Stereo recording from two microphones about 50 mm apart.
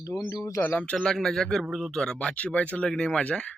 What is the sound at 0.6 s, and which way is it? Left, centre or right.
Speech, left.